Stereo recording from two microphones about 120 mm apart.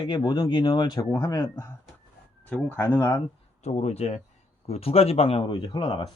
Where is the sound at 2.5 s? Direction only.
15° left (ahead or behind).